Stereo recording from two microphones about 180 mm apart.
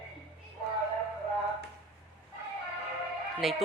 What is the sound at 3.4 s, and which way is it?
Speech, centre (ahead or behind).